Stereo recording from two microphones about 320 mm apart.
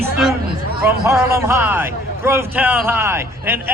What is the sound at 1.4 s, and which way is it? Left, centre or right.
A man's voice, centre.